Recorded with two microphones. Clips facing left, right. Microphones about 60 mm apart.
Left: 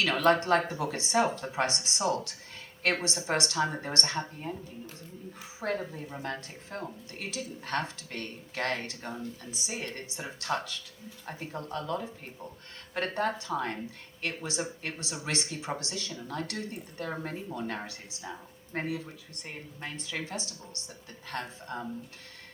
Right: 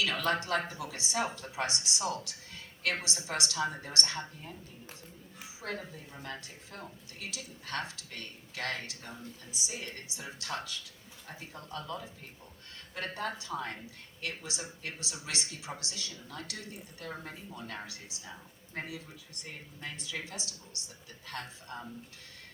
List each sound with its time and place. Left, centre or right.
0.0 s speech: left
5.5 s speech: left
12.9 s speech: left